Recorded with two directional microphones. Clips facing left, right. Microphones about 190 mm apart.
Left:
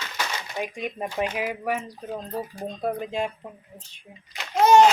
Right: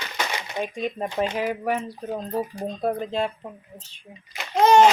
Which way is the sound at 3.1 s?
10° left (ahead or behind).